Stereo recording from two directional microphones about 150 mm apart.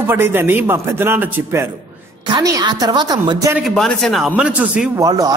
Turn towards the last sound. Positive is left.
turn(degrees=-25)  # may be behind; listen again after turning